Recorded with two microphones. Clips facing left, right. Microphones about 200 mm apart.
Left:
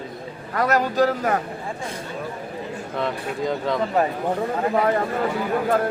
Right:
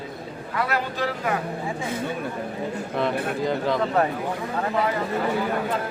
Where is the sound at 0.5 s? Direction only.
40° left (ahead or behind).